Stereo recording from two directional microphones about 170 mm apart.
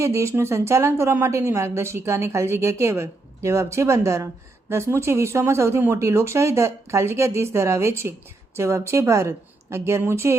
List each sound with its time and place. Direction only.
0.0 s a woman's voice: 15° right (ahead or behind)